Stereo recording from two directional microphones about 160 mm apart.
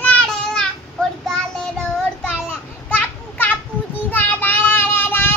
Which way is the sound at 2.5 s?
10° left (ahead or behind).